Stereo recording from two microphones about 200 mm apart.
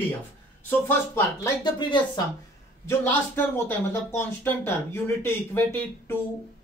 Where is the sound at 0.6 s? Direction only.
10° left (ahead or behind).